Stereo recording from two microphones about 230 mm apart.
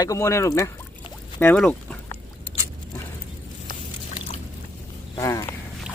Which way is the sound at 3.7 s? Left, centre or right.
Left.